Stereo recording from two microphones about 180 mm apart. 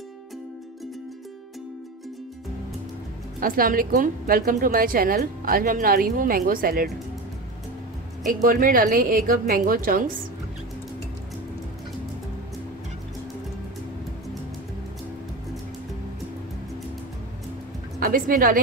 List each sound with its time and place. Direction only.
3.3 s a woman's voice: 50° right (ahead or behind)
8.3 s a woman's voice: 50° right (ahead or behind)
17.9 s a woman's voice: 50° right (ahead or behind)